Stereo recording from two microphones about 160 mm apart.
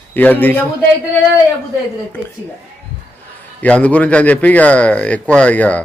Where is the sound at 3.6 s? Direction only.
10° left (ahead or behind).